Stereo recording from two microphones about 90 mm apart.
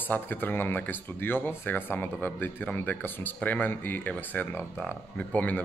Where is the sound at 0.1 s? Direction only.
20° left (ahead or behind).